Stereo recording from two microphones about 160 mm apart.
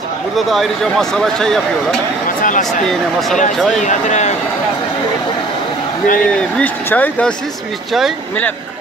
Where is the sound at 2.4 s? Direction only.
55° left (ahead or behind).